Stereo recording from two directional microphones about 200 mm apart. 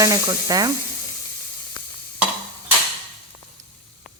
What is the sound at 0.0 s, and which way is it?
Speech, 15° right (ahead or behind).